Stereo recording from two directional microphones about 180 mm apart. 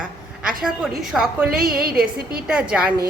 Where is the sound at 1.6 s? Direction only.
55° right (ahead or behind).